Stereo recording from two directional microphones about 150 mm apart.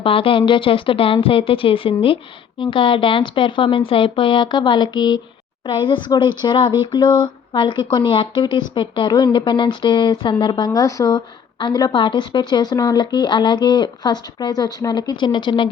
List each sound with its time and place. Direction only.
0.0 s speech: 35° left (ahead or behind)